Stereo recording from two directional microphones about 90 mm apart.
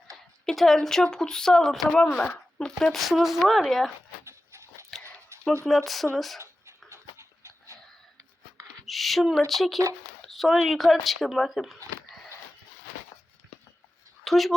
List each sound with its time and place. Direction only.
0.4 s speech: 5° left (ahead or behind)
2.0 s speech: 15° left (ahead or behind)
4.2 s a sound: 30° right (ahead or behind)
5.6 s speech: centre (ahead or behind)
6.9 s dog: 35° right (ahead or behind)
8.9 s speech: centre (ahead or behind)
14.3 s speech: centre (ahead or behind)